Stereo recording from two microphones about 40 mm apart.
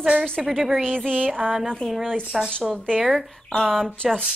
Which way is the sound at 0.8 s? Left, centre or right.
Centre.